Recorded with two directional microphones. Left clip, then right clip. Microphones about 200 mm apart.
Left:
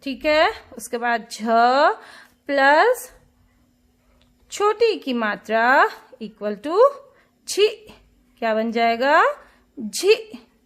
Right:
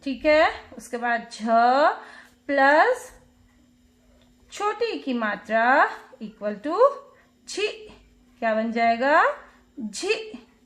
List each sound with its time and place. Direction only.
0.0 s speech: 35° left (ahead or behind)
4.4 s a woman's voice: 40° left (ahead or behind)